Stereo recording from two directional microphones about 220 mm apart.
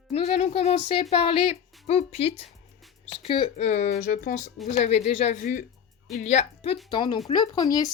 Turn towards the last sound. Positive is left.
turn(degrees=20)  # may be behind; listen again after turning